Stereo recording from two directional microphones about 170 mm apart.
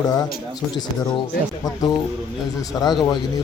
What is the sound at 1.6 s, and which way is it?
Speech, 25° left (ahead or behind).